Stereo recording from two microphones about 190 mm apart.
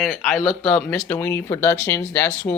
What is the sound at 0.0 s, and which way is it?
Speech, centre (ahead or behind).